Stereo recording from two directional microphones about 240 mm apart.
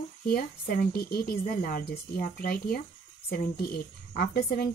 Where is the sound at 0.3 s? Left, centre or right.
Left.